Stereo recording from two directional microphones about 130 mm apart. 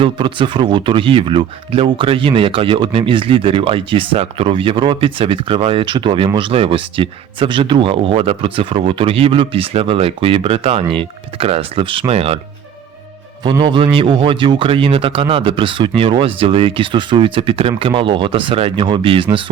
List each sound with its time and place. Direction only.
0.0 s speech: 40° right (ahead or behind)
13.4 s a man's voice: 35° right (ahead or behind)